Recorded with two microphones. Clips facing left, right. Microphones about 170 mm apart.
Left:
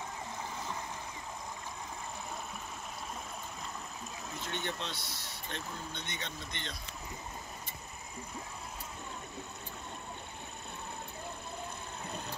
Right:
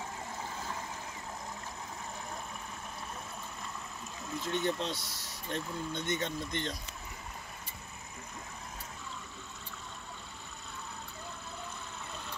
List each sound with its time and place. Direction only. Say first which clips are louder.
4.5 s speech: right 7 dB; 35° right (ahead or behind)